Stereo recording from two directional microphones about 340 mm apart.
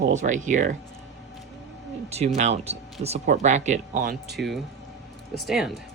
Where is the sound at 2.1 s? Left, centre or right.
Centre.